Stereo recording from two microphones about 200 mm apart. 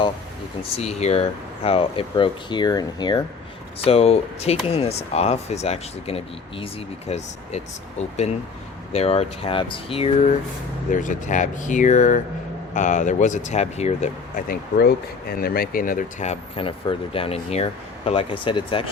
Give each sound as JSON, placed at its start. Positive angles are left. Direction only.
{"t": 0.8, "sound": "speech", "side_deg": 30}